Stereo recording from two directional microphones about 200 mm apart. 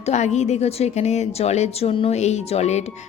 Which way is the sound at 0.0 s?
35° left (ahead or behind).